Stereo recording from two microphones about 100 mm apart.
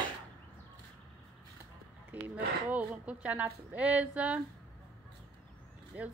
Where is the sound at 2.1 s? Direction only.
15° right (ahead or behind).